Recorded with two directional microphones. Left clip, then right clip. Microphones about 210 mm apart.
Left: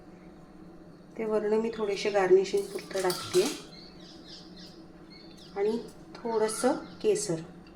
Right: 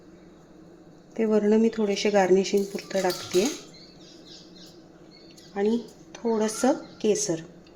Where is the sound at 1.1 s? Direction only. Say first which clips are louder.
Right 5 dB; 55° right (ahead or behind).